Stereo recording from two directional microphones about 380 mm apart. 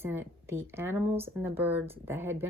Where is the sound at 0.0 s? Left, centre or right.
Centre.